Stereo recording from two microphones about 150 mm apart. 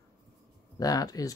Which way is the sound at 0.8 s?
25° left (ahead or behind).